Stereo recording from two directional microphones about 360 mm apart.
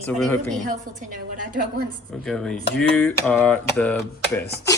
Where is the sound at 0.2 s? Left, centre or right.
Centre.